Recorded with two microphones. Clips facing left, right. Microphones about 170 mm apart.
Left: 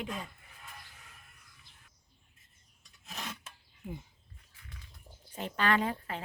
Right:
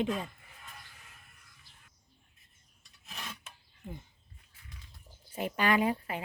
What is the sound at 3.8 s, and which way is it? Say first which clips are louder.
Speech: left 2 dB; 10° left (ahead or behind).